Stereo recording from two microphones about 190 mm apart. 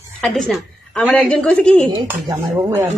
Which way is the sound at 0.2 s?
Centre (ahead or behind).